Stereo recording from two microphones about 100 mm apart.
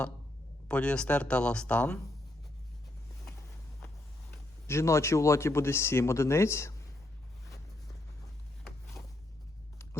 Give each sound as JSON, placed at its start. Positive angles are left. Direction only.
{"t": 0.7, "sound": "speech", "side_deg": 10}
{"t": 4.6, "sound": "a man's voice", "side_deg": 30}
{"t": 9.0, "sound": "a sound", "side_deg": 5}